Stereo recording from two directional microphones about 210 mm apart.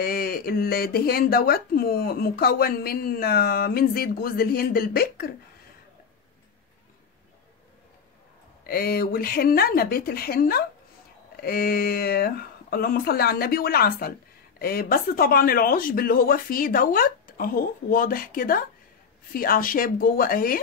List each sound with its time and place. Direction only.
0.0 s speech: 45° left (ahead or behind)
8.6 s speech: 45° left (ahead or behind)